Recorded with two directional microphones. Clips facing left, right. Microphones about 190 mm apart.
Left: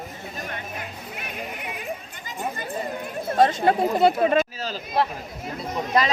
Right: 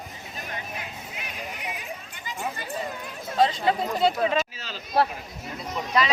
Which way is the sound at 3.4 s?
50° left (ahead or behind).